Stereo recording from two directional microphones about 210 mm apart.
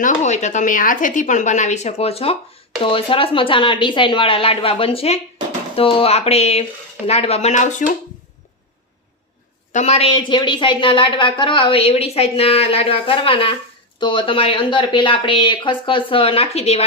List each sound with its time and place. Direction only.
0.0 s a woman's voice: 35° left (ahead or behind)
9.7 s speech: 30° left (ahead or behind)